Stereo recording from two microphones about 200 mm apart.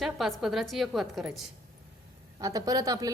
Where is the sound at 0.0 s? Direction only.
Centre (ahead or behind).